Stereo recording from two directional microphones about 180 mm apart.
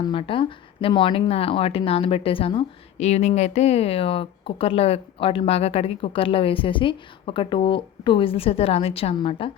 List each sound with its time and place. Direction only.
0.0 s a woman's voice: 30° left (ahead or behind)